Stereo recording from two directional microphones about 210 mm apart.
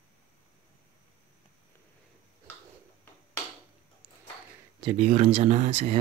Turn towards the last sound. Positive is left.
turn(degrees=-35)  # may be behind; listen again after turning